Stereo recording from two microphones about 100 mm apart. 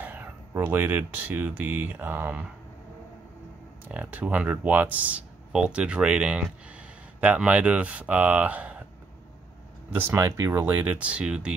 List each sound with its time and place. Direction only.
0.0 s speech: 20° right (ahead or behind)
3.9 s speech: 15° right (ahead or behind)
9.9 s speech: 25° right (ahead or behind)